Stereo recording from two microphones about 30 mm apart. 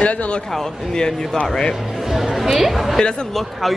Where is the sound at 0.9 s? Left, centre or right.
Left.